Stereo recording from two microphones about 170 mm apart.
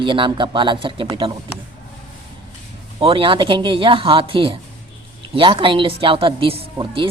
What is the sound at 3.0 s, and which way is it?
Speech, 30° right (ahead or behind).